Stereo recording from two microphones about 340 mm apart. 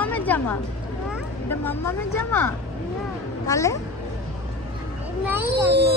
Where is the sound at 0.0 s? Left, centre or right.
Centre.